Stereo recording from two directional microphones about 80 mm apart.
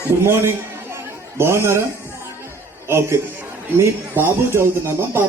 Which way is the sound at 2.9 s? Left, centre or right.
Right.